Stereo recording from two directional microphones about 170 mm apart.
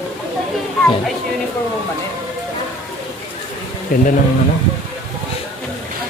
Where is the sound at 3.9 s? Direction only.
55° left (ahead or behind).